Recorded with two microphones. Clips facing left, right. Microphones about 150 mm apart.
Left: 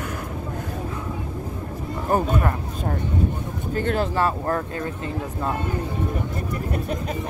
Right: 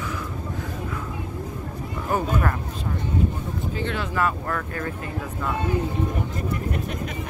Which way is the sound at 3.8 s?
45° left (ahead or behind).